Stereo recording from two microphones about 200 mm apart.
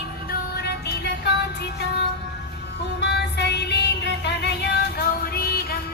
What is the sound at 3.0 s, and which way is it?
Music, 55° left (ahead or behind).